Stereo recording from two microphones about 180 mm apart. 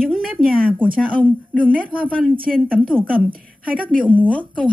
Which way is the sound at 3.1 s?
50° right (ahead or behind).